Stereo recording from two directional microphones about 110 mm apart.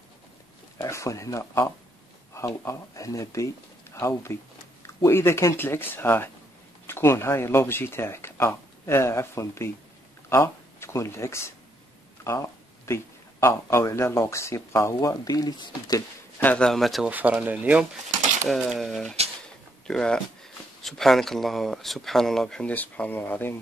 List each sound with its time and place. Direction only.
0.7 s speech: 25° left (ahead or behind)
16.3 s a man's voice: 15° left (ahead or behind)
16.6 s speech: centre (ahead or behind)
17.1 s speech: 15° right (ahead or behind); by 23.6 s 20° left (ahead or behind)